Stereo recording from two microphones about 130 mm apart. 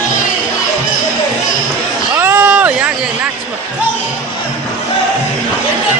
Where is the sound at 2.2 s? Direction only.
15° right (ahead or behind).